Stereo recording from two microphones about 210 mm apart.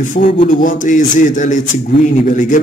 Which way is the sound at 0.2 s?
35° left (ahead or behind).